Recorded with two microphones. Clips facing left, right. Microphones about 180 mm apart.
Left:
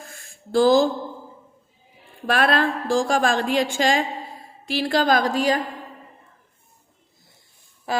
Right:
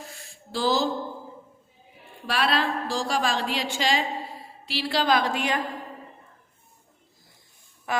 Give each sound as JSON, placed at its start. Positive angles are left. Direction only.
{"t": 0.0, "sound": "a sound", "side_deg": 50}
{"t": 2.2, "sound": "a woman's voice", "side_deg": 50}
{"t": 7.9, "sound": "speech", "side_deg": 30}